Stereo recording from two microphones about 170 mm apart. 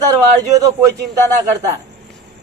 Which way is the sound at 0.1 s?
20° right (ahead or behind).